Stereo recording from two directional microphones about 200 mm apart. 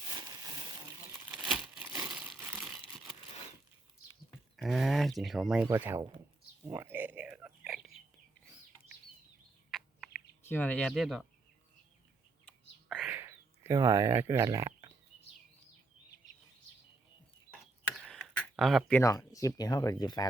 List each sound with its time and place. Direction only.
0.1 s a sound: 20° right (ahead or behind)
1.3 s crumpling: 5° right (ahead or behind)
1.9 s crumpling: 15° right (ahead or behind)
4.5 s speech: centre (ahead or behind)
5.6 s speech: 10° right (ahead or behind)
6.7 s a sound: 10° right (ahead or behind)
9.7 s bird: centre (ahead or behind)
10.5 s speech: 10° left (ahead or behind)
12.5 s bird: centre (ahead or behind)
13.1 s a sound: 15° right (ahead or behind)
17.8 s speech: 5° left (ahead or behind); by 20.2 s 20° left (ahead or behind)